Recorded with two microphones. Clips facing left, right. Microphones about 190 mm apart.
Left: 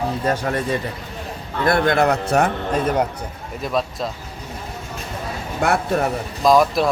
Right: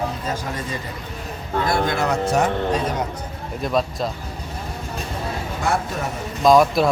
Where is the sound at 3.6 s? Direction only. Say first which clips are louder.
Right 1 dB; centre (ahead or behind).